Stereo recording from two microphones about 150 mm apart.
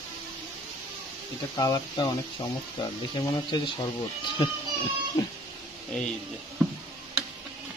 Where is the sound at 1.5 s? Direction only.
25° left (ahead or behind).